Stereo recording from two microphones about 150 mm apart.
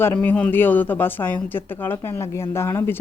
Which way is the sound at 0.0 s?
10° left (ahead or behind).